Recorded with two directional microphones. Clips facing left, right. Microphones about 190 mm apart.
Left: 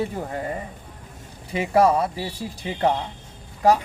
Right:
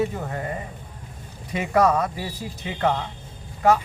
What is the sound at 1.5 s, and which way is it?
Speech, 30° left (ahead or behind).